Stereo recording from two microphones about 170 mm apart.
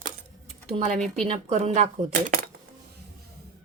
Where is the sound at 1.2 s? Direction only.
40° right (ahead or behind).